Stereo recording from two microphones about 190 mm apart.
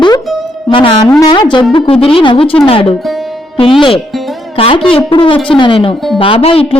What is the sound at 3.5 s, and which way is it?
A woman's voice, 25° left (ahead or behind).